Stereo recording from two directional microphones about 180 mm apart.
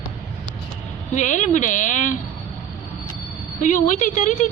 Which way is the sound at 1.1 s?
40° left (ahead or behind).